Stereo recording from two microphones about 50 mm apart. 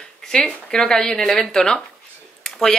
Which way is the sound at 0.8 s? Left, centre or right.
Centre.